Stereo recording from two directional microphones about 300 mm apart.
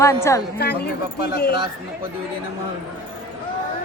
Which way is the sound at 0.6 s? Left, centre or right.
Left.